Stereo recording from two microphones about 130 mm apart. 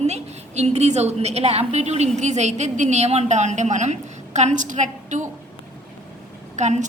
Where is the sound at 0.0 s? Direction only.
55° right (ahead or behind).